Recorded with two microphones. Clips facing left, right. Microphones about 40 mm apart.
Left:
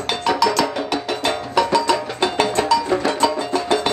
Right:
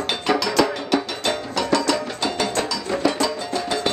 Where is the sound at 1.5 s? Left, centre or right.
Left.